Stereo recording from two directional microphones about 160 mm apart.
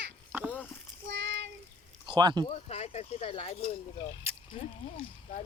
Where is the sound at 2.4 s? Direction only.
40° left (ahead or behind).